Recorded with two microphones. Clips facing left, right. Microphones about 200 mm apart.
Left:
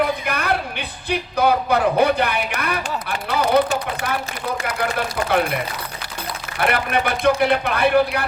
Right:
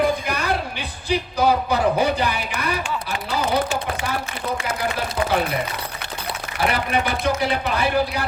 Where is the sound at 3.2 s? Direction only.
60° left (ahead or behind).